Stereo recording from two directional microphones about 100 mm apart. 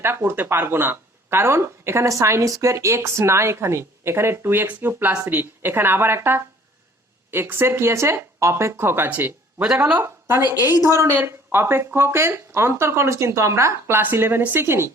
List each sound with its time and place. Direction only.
0.0 s speech: 20° right (ahead or behind)